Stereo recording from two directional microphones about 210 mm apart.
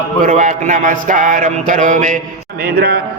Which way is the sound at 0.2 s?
40° right (ahead or behind).